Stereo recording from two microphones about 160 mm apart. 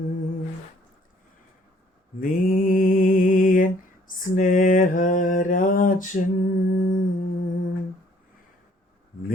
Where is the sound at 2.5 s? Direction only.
60° left (ahead or behind).